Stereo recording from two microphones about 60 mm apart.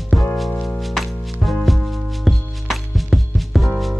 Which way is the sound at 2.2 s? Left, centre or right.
Centre.